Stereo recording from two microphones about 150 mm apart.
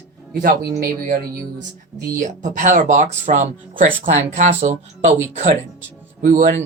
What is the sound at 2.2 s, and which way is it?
Speech, 55° right (ahead or behind).